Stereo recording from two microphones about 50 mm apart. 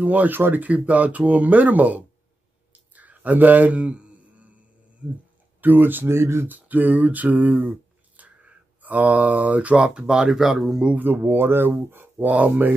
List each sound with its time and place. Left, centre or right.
0.0 s speech: right
2.7 s a sound: right
5.6 s speech: right
6.0 s speech: right
6.4 s speech: right
8.2 s a sound: right
8.8 s speech: right; by 10.9 s centre
11.1 s speech: right